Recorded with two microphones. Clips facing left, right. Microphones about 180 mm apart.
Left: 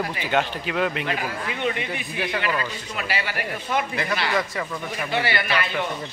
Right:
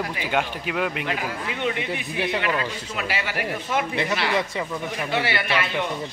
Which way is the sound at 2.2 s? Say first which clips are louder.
Right 2 dB; 25° right (ahead or behind).